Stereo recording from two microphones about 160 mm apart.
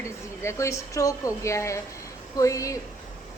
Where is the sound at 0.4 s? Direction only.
20° left (ahead or behind).